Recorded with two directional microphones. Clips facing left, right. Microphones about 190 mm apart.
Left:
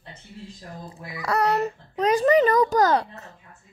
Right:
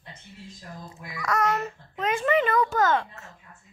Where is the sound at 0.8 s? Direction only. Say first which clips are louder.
Left 2 dB; 30° left (ahead or behind).